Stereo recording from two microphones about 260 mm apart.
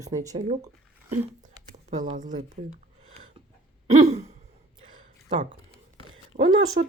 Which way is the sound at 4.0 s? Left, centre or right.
Right.